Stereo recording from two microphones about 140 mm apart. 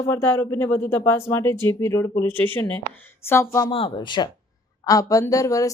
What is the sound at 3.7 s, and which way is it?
Speech, 40° left (ahead or behind).